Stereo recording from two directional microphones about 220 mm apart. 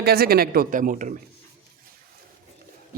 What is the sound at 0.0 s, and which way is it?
Speech, 45° right (ahead or behind).